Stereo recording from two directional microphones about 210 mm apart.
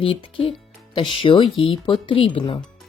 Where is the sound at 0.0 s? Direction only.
25° left (ahead or behind).